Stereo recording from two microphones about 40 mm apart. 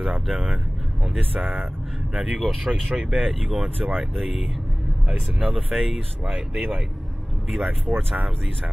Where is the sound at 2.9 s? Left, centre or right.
Right.